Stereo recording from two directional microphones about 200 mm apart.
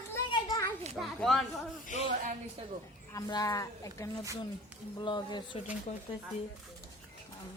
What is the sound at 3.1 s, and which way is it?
Speech, 15° left (ahead or behind).